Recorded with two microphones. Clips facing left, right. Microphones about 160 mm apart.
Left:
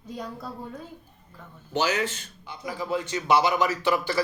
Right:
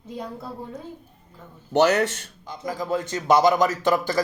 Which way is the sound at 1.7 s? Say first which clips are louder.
Right 7 dB; 65° right (ahead or behind).